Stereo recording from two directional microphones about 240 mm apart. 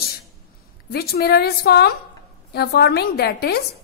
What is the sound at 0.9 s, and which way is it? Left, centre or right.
A woman's voice, left.